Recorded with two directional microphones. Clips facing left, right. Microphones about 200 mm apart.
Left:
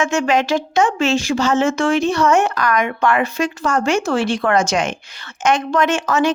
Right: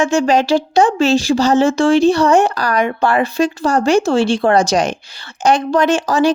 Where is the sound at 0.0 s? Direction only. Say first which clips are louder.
Right 4 dB; 35° right (ahead or behind).